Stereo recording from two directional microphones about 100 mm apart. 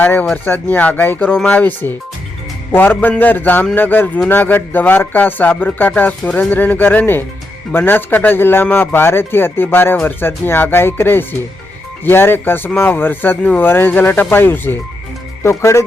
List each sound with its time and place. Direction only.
0.0 s speech: 15° left (ahead or behind)